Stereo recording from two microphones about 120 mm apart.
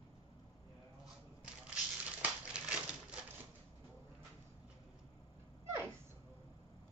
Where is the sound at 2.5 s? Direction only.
10° right (ahead or behind).